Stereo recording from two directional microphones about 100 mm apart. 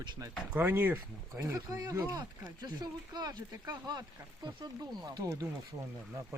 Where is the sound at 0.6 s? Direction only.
20° right (ahead or behind); by 5.3 s 40° right (ahead or behind).